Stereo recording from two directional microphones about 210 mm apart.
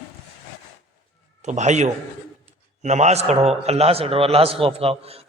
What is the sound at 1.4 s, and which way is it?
A man's voice, 35° right (ahead or behind).